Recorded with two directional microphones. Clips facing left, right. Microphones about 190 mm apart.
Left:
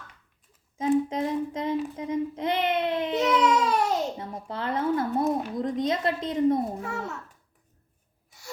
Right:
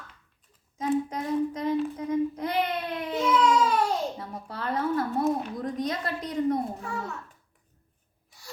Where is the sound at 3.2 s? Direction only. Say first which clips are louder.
Even; 65° left (ahead or behind).